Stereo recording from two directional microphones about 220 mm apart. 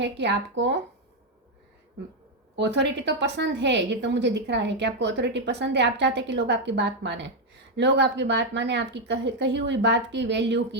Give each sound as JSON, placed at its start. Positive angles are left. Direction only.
{"t": 0.0, "sound": "a woman's voice", "side_deg": -50}
{"t": 2.6, "sound": "a woman's voice", "side_deg": -50}